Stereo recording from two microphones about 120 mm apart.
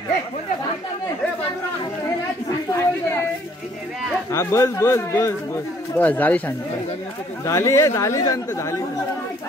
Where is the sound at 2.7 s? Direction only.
25° left (ahead or behind).